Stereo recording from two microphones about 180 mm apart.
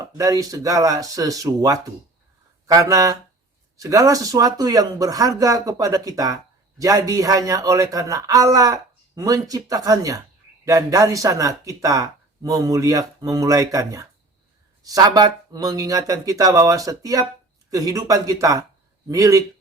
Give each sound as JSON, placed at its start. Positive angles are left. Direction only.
{"t": 0.0, "sound": "speech", "side_deg": -20}